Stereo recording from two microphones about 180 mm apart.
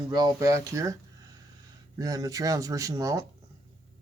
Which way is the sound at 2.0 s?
20° right (ahead or behind).